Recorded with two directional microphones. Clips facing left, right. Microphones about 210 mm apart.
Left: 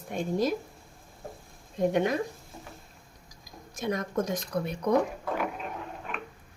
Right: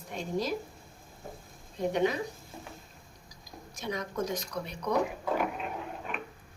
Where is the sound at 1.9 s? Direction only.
50° left (ahead or behind).